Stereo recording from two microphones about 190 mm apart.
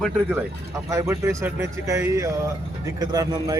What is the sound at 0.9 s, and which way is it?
A man's voice, 15° right (ahead or behind).